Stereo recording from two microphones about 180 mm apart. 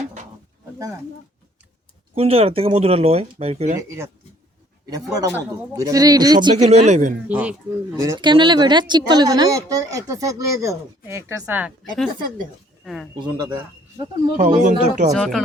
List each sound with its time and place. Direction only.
2.1 s speech: 35° right (ahead or behind)
3.8 s speech: 15° right (ahead or behind)
6.6 s speech: 35° right (ahead or behind)
7.3 s speech: 5° right (ahead or behind)
7.9 s speech: 15° right (ahead or behind); by 13.1 s centre (ahead or behind)
13.1 s speech: 25° right (ahead or behind)
14.3 s speech: 40° right (ahead or behind)
15.1 s speech: centre (ahead or behind)